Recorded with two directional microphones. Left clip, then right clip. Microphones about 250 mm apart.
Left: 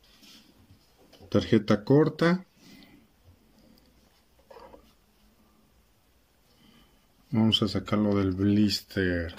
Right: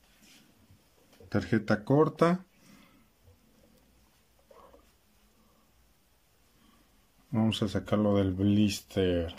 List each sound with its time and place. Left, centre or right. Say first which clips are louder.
1.3 s speech: left 5 dB; centre
7.3 s speech: left 5 dB; centre